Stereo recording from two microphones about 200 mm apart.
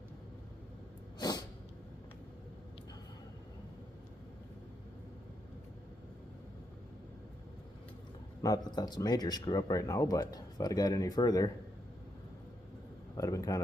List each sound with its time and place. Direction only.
8.4 s speech: 20° left (ahead or behind)
13.1 s a man's voice: 15° left (ahead or behind)